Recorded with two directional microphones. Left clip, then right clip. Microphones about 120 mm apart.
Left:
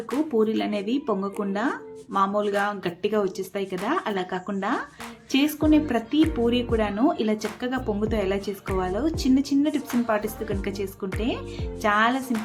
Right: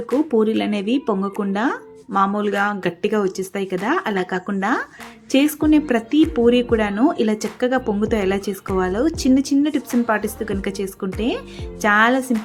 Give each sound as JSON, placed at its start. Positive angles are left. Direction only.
{"t": 0.3, "sound": "speech", "side_deg": -35}